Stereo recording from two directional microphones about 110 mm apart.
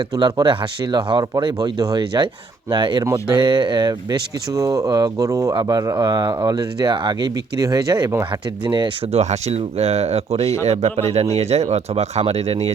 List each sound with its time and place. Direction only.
0.2 s speech: 40° right (ahead or behind)
8.6 s speech: 45° right (ahead or behind)
9.1 s speech: 70° right (ahead or behind)